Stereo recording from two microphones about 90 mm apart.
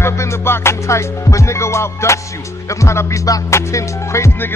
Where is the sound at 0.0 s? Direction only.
30° left (ahead or behind).